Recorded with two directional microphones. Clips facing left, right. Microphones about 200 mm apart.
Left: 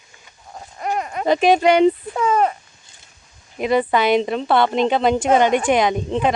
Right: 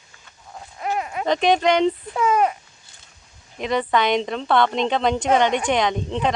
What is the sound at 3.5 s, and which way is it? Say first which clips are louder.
Speech: left 3 dB; 10° left (ahead or behind).